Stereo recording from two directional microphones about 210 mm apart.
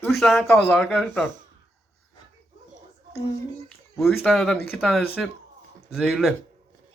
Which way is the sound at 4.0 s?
Centre (ahead or behind).